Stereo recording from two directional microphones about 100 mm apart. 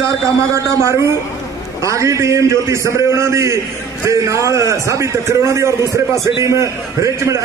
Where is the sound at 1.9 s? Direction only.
30° right (ahead or behind).